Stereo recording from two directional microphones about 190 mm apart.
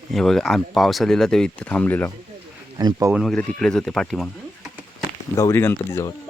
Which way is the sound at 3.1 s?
Centre (ahead or behind).